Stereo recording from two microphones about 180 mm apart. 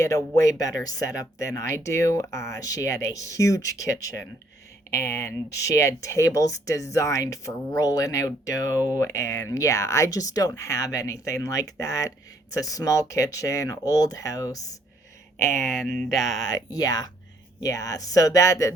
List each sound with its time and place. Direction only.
0.0 s speech: 15° left (ahead or behind)
15.8 s a sound: centre (ahead or behind)
16.4 s speech: 20° left (ahead or behind)